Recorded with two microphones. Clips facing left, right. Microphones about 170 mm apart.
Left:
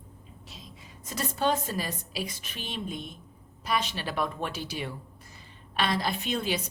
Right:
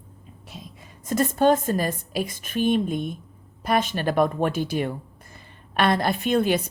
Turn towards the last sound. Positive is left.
turn(degrees=-50)  # may be behind; listen again after turning